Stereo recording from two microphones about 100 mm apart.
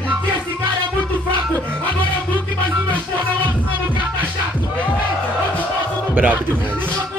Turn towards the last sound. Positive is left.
turn(degrees=-15)  # may be behind; listen again after turning